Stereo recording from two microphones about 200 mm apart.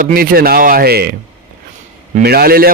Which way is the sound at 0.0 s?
45° right (ahead or behind).